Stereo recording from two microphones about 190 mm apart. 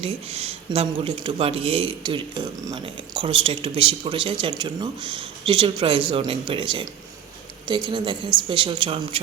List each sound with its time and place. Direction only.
0.0 s speech: 30° right (ahead or behind)